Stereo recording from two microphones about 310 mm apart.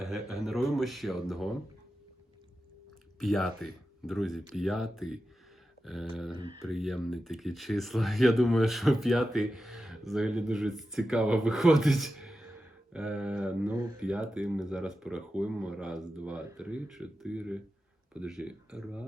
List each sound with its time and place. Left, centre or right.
0.0 s speech: centre
3.2 s speech: centre